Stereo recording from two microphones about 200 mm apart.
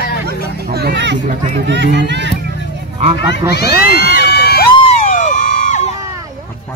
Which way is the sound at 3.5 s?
50° left (ahead or behind).